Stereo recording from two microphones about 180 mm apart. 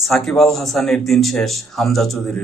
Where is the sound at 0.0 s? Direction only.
Centre (ahead or behind).